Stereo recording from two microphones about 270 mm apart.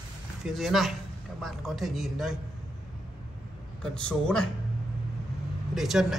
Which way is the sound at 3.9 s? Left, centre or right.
Centre.